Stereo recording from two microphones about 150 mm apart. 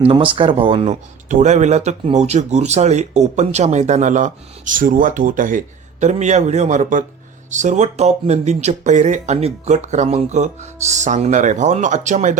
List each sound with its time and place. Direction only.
0.3 s speech: 35° right (ahead or behind)
1.3 s speech: 50° right (ahead or behind)